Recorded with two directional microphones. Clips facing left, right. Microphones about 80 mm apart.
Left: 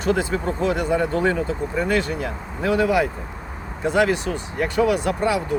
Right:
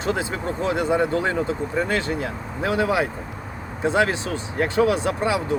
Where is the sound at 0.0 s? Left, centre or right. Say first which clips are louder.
Left 3 dB; right.